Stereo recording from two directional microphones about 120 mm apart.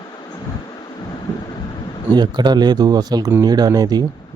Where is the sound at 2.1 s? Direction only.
35° right (ahead or behind).